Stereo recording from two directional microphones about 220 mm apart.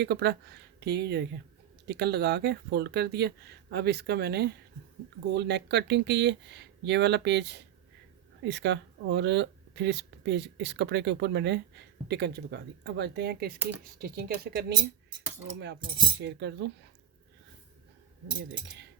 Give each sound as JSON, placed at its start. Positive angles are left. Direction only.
{"t": 0.0, "sound": "speech", "side_deg": -50}
{"t": 16.1, "sound": "speech", "side_deg": -50}
{"t": 18.3, "sound": "speech", "side_deg": -55}